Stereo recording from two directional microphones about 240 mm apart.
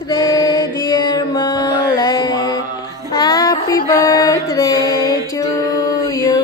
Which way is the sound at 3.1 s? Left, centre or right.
Centre.